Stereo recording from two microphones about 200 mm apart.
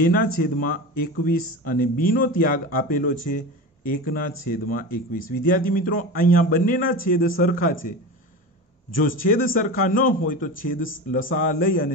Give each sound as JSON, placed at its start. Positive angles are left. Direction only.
{"t": 0.0, "sound": "speech", "side_deg": 45}
{"t": 9.2, "sound": "speech", "side_deg": 45}